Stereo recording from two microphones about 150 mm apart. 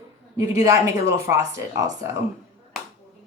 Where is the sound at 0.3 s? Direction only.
20° right (ahead or behind).